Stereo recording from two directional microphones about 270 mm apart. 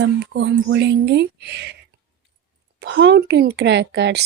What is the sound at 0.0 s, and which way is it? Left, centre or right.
Speech, right.